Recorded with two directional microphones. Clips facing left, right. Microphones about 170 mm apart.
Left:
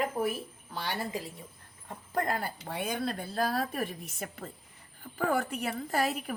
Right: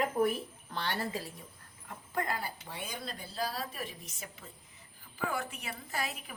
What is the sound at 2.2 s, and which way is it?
A woman's voice, 50° left (ahead or behind).